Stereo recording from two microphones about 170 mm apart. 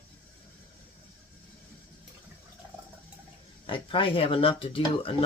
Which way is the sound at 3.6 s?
30° left (ahead or behind).